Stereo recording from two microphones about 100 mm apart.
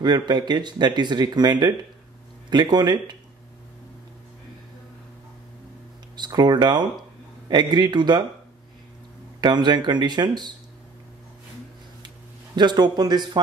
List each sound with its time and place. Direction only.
0.3 s speech: 45° right (ahead or behind)
6.1 s speech: 45° right (ahead or behind)
9.4 s speech: 45° right (ahead or behind)
12.5 s speech: 45° right (ahead or behind)